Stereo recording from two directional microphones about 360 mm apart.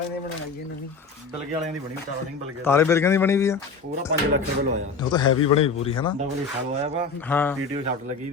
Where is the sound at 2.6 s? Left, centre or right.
Centre.